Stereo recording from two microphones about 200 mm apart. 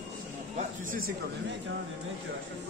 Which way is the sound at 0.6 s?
45° right (ahead or behind).